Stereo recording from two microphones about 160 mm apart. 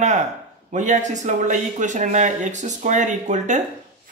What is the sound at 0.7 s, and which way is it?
Speech, 50° right (ahead or behind).